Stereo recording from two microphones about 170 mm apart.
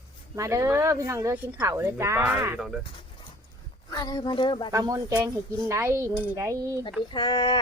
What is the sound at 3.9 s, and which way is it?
Speech, 25° left (ahead or behind).